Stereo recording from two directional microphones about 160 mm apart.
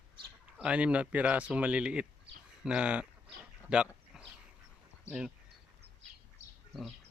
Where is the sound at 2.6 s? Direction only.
5° right (ahead or behind).